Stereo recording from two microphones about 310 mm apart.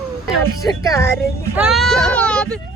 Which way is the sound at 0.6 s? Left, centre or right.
Centre.